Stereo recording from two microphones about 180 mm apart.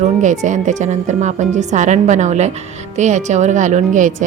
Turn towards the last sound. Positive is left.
turn(degrees=-45)  # may be behind; listen again after turning